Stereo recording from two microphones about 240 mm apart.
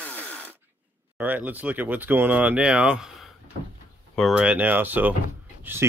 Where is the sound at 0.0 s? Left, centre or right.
Centre.